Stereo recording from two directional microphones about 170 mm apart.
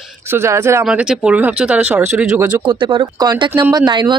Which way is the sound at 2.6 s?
30° right (ahead or behind).